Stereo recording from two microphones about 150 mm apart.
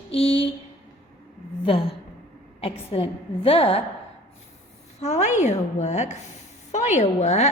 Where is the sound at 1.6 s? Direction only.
40° left (ahead or behind).